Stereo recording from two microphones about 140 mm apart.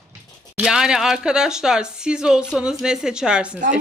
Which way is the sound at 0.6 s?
5° right (ahead or behind).